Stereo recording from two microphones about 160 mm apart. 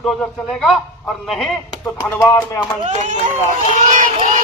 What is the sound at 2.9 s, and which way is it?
Speech, 45° right (ahead or behind).